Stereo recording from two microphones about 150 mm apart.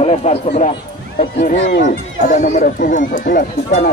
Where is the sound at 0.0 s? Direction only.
45° left (ahead or behind).